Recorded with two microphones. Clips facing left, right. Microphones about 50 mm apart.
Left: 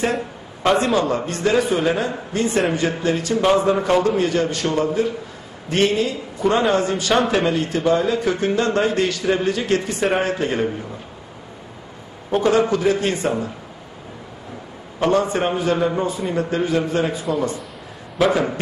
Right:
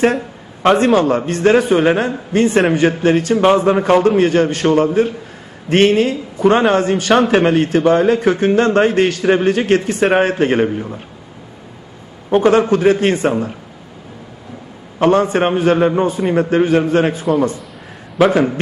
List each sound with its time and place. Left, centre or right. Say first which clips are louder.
0.6 s a man's voice: right 6 dB; right
7.1 s a man's voice: right 5 dB; centre
7.3 s a man's voice: right 7 dB; right
12.3 s a man's voice: right 5 dB; right
15.0 s a man's voice: right 5 dB; right
18.1 s a man's voice: right 5 dB; centre